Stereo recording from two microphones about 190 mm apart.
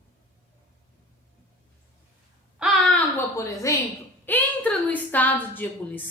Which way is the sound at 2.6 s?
5° left (ahead or behind).